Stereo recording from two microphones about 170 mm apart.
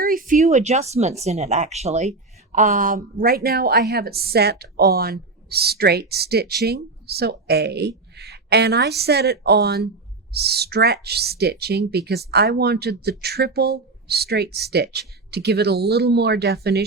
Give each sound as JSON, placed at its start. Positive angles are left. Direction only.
{"t": 0.0, "sound": "speech", "side_deg": -55}